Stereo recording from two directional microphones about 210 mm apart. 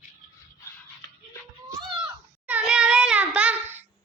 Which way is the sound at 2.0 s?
5° right (ahead or behind).